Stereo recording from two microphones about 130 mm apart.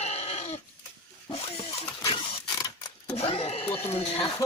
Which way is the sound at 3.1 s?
50° left (ahead or behind).